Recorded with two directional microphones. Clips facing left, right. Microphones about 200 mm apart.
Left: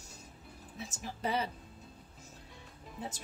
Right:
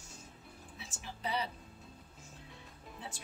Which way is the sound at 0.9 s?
45° left (ahead or behind).